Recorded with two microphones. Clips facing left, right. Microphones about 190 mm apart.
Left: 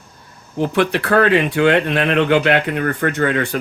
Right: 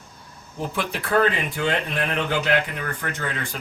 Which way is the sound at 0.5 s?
75° left (ahead or behind).